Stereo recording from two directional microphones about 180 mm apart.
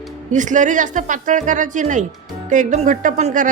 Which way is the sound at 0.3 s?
45° right (ahead or behind).